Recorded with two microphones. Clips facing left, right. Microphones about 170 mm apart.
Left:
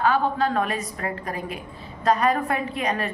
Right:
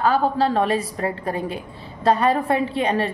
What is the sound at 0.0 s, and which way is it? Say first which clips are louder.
A woman's voice: right 3 dB; 35° right (ahead or behind).